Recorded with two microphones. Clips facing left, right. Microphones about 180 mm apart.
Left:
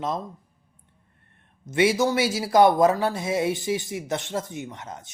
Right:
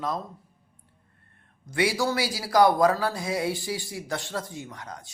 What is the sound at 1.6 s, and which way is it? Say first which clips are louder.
Speech: left 4 dB; 20° left (ahead or behind).